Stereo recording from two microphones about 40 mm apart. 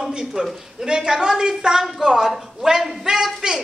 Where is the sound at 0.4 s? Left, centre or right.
Centre.